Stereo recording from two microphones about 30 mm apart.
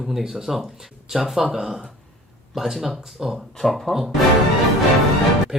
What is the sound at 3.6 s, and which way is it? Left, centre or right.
Speech, centre.